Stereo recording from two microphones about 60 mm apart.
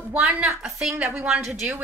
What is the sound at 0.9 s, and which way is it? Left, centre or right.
Speech, right.